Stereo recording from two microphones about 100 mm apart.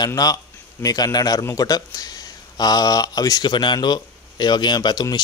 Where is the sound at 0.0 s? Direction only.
40° left (ahead or behind).